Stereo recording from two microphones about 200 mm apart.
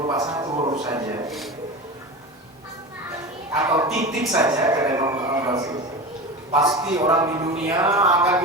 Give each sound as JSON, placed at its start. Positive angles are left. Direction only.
{"t": 0.1, "sound": "music", "side_deg": -20}
{"t": 0.9, "sound": "a man's voice", "side_deg": -20}
{"t": 3.5, "sound": "a man's voice", "side_deg": -15}